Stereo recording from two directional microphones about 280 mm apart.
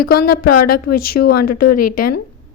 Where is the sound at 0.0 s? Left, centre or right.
Left.